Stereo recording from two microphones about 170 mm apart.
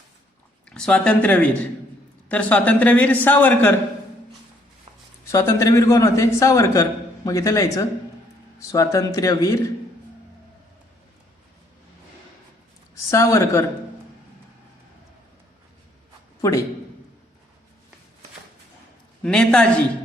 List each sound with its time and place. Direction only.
0.7 s a man's voice: 5° left (ahead or behind)
5.3 s a man's voice: 20° left (ahead or behind)
13.1 s a man's voice: 15° left (ahead or behind)
19.2 s a man's voice: 5° left (ahead or behind)